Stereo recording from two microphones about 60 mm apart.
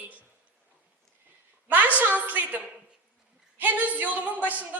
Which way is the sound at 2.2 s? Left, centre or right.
Right.